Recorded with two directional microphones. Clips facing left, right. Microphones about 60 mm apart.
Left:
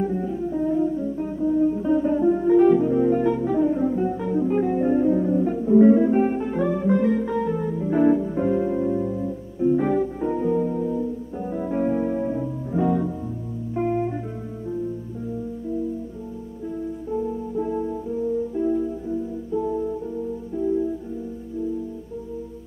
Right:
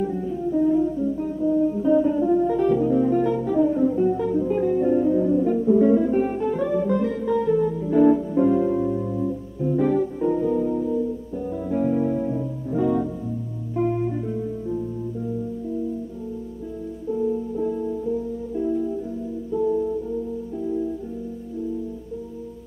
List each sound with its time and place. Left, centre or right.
1.8 s music: left
19.5 s music: centre